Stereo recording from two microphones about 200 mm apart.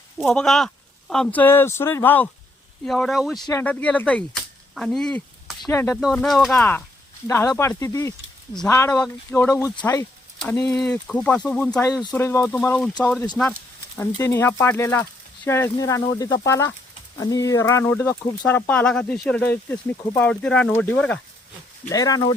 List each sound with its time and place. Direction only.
0.2 s speech: 5° left (ahead or behind)
5.6 s speech: 15° left (ahead or behind)
5.9 s speech: centre (ahead or behind)
21.8 s speech: 15° left (ahead or behind)